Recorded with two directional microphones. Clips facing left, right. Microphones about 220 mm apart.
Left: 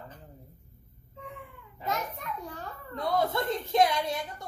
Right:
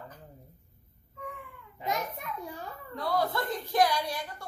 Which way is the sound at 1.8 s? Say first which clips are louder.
Even; 15° right (ahead or behind).